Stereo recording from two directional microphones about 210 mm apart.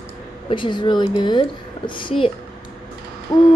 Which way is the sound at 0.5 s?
20° left (ahead or behind).